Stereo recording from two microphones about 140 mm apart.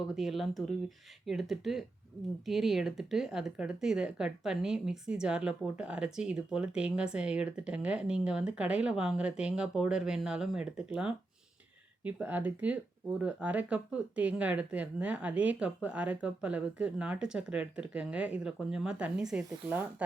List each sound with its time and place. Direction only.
0.1 s speech: centre (ahead or behind)